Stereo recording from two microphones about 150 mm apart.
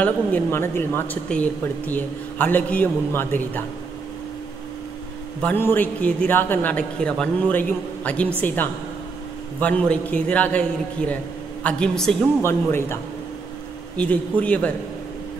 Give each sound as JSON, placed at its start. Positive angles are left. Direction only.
{"t": 0.0, "sound": "speech", "side_deg": 15}
{"t": 5.4, "sound": "a man's voice", "side_deg": 15}
{"t": 12.4, "sound": "speech", "side_deg": 15}